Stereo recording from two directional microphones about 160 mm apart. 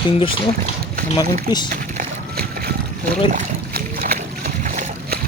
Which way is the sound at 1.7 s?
65° right (ahead or behind).